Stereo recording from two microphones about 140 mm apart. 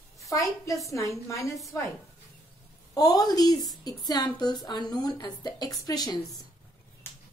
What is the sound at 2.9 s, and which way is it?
Speech, 25° left (ahead or behind).